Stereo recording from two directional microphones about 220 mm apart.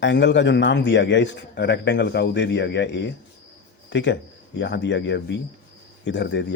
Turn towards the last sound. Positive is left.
turn(degrees=55)  # may be behind; listen again after turning